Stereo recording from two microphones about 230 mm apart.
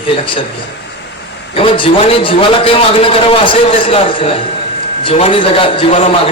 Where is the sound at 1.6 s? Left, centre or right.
Left.